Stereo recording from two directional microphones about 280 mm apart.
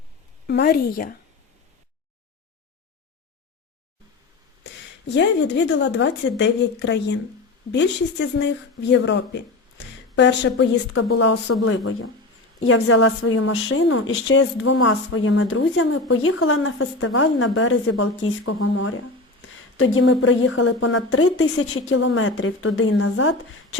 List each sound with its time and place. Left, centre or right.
0.4 s speech: left
4.6 s speech: left
11.6 s a woman's voice: left